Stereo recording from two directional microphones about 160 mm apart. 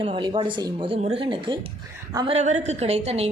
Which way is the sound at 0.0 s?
30° right (ahead or behind).